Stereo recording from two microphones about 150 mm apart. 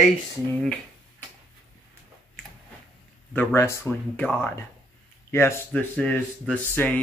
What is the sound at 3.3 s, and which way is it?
Speech, 10° left (ahead or behind).